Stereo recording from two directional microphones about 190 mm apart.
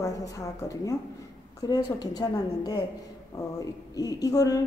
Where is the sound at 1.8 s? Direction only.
20° left (ahead or behind).